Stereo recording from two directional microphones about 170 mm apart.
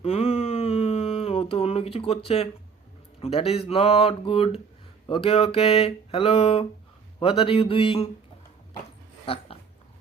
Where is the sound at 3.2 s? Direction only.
35° left (ahead or behind).